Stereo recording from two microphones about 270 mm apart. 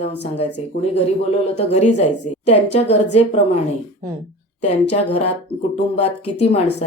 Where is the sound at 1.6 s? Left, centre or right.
Left.